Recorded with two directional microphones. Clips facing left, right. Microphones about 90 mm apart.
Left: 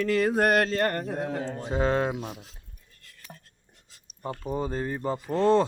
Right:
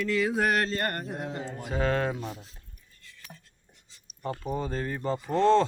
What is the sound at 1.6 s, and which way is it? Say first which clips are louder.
Speech: left 2 dB; 25° left (ahead or behind).